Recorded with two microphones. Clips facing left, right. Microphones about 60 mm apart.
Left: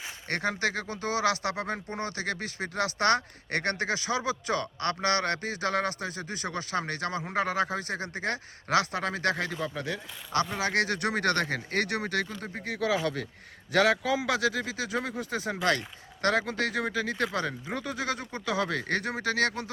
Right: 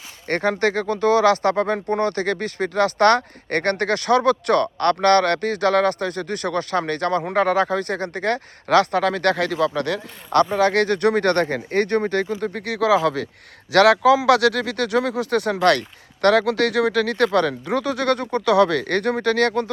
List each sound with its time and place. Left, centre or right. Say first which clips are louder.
0.3 s speech: right 9 dB; right
10.6 s speech: right 10 dB; right